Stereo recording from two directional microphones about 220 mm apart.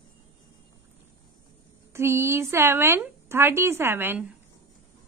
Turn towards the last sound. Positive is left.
turn(degrees=-10)  # may be behind; listen again after turning